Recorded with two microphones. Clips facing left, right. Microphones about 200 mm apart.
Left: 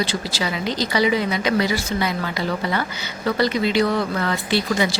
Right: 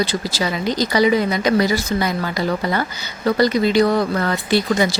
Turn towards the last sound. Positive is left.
turn(degrees=-45)  # may be behind; listen again after turning